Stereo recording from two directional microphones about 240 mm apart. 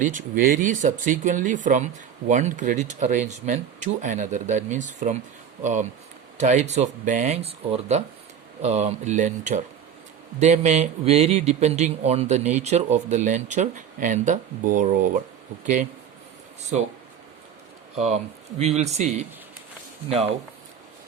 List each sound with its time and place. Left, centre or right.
0.0 s a man's voice: right
17.9 s a man's voice: right